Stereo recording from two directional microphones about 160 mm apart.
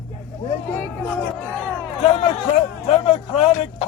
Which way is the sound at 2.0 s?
40° left (ahead or behind).